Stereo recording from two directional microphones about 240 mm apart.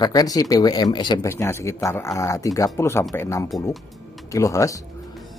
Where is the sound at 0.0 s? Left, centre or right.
Centre.